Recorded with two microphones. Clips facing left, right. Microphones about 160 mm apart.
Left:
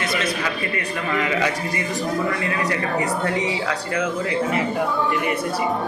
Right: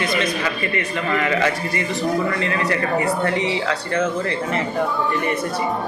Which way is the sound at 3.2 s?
10° left (ahead or behind).